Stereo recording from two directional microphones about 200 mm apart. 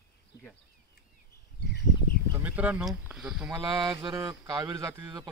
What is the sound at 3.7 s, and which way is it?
Speech, 20° right (ahead or behind).